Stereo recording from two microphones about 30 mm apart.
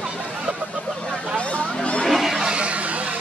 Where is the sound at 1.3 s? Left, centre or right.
Left.